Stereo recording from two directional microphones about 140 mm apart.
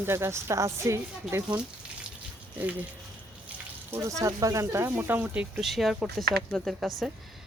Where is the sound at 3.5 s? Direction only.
20° right (ahead or behind); by 6.9 s centre (ahead or behind).